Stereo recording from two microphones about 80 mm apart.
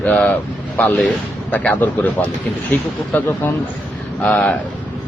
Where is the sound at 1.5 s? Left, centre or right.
Centre.